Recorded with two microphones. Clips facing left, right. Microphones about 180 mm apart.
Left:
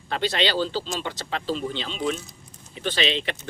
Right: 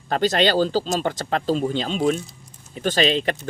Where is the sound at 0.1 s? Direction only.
45° right (ahead or behind).